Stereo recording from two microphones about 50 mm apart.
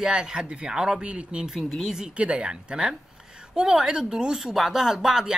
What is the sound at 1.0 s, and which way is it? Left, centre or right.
Speech, right.